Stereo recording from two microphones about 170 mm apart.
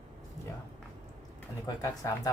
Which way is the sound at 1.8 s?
20° left (ahead or behind).